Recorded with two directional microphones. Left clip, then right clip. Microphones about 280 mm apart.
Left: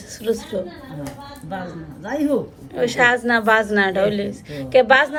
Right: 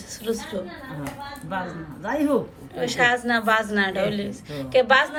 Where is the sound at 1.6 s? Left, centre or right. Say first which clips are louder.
Even; right.